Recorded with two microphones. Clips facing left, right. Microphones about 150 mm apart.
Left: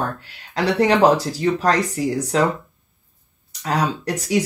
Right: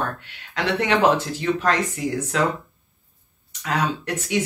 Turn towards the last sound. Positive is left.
turn(degrees=35)  # may be behind; listen again after turning